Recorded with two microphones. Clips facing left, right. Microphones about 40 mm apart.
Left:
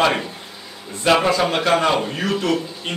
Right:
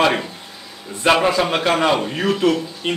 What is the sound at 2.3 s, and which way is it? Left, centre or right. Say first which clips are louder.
Speech: right 3 dB; right.